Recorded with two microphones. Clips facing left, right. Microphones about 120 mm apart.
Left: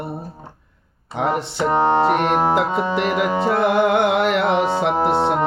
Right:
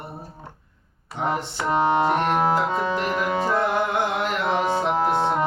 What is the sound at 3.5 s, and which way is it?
Music, 75° left (ahead or behind).